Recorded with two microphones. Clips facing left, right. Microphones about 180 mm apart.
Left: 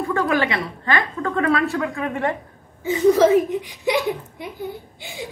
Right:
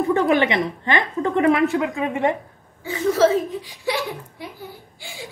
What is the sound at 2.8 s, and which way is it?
Speech, 15° left (ahead or behind).